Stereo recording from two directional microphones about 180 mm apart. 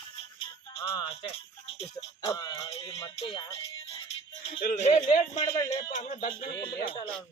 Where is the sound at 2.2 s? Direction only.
20° left (ahead or behind).